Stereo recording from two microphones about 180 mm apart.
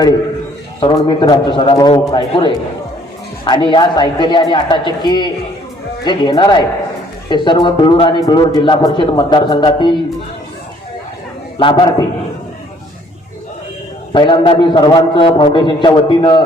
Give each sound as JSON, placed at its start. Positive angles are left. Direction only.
{"t": 0.8, "sound": "a man's voice", "side_deg": 25}
{"t": 11.6, "sound": "a man's voice", "side_deg": 25}
{"t": 14.1, "sound": "a man's voice", "side_deg": 25}